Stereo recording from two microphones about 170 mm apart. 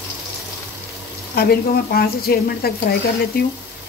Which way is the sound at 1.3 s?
65° left (ahead or behind).